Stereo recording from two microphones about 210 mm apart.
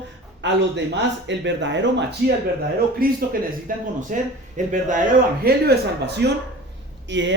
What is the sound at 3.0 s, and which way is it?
Speech, 45° right (ahead or behind).